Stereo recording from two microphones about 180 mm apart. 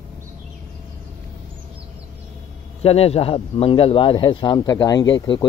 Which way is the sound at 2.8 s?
35° left (ahead or behind).